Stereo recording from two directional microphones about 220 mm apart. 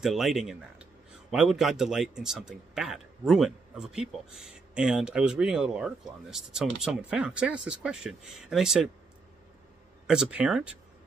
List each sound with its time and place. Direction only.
0.0 s a man's voice: centre (ahead or behind)
10.0 s a man's voice: 5° right (ahead or behind)